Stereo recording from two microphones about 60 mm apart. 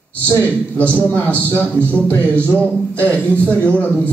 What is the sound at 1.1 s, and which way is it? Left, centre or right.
Speech, right.